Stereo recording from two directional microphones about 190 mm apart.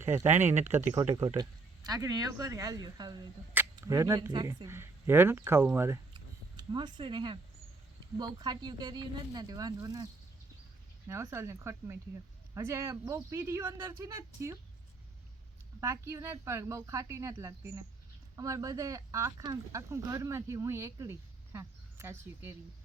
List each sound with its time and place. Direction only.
0.0 s speech: 15° right (ahead or behind)
6.1 s a sound: 25° right (ahead or behind)
8.2 s speech: 20° right (ahead or behind)
11.1 s speech: 15° right (ahead or behind)
15.8 s speech: 15° right (ahead or behind)